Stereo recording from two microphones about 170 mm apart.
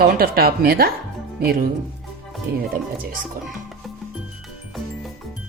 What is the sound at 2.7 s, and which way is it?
Speech, 55° right (ahead or behind).